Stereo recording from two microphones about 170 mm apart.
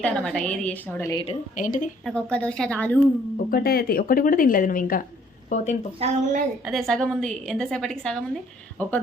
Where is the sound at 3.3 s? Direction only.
60° left (ahead or behind); by 5.7 s 45° left (ahead or behind).